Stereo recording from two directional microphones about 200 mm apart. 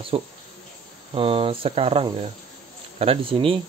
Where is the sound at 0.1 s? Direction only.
25° right (ahead or behind).